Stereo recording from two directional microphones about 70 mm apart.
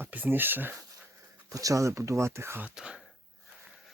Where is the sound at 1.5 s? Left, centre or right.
Right.